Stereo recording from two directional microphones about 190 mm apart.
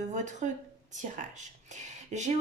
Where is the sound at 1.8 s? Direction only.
40° right (ahead or behind).